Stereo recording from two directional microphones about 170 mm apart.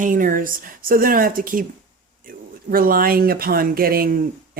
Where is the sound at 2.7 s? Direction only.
60° right (ahead or behind).